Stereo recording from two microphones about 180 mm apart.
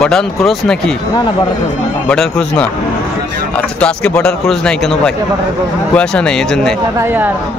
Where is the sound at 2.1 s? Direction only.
5° left (ahead or behind).